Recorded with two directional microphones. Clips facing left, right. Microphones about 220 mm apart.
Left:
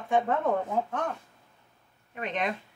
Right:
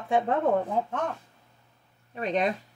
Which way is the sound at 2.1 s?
35° right (ahead or behind).